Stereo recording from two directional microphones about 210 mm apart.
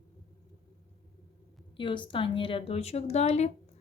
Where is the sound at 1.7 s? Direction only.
25° left (ahead or behind).